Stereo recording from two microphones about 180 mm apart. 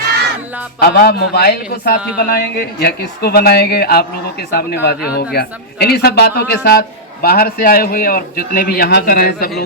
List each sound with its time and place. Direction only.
0.8 s a man's voice: 60° left (ahead or behind)